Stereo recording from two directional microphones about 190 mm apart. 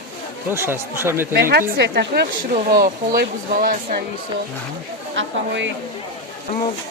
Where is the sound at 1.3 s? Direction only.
60° right (ahead or behind).